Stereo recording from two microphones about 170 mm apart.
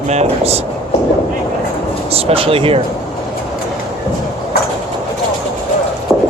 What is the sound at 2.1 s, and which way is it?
Speech, 35° right (ahead or behind).